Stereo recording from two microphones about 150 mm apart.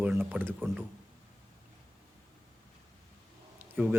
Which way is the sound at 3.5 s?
10° right (ahead or behind).